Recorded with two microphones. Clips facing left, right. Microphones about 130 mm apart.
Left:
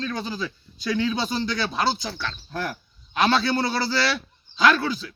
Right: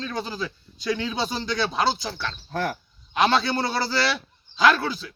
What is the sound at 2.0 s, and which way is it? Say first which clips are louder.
A man's voice: even; 25° right (ahead or behind).